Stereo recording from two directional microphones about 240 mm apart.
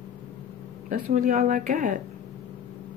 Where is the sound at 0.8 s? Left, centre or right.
Right.